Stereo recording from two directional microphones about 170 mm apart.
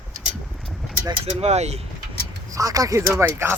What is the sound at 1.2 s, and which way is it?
Speech, 40° right (ahead or behind).